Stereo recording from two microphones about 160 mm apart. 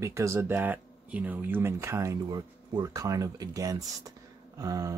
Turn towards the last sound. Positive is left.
turn(degrees=-20)  # may be behind; listen again after turning